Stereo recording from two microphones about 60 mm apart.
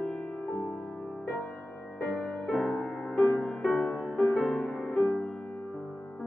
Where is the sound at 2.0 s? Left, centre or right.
Centre.